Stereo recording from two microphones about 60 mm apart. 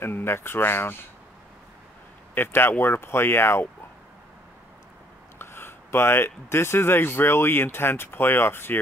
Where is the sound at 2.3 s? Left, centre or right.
Left.